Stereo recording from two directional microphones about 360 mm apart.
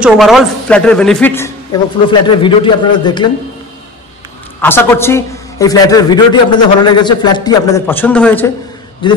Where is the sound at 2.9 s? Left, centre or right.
Centre.